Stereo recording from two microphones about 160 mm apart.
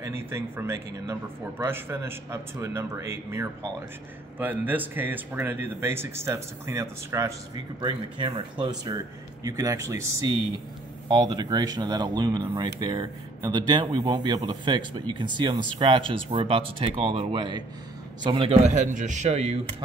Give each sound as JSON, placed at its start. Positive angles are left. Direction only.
{"t": 0.0, "sound": "speech", "side_deg": -15}
{"t": 7.8, "sound": "a man's voice", "side_deg": -30}